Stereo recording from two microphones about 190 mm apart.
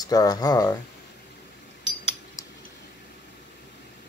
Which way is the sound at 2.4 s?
15° left (ahead or behind).